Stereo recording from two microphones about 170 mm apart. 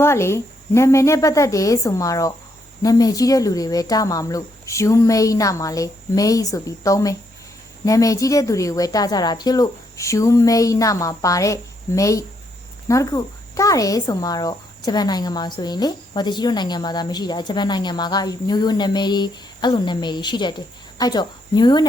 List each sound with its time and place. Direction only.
0.0 s speech: 15° left (ahead or behind)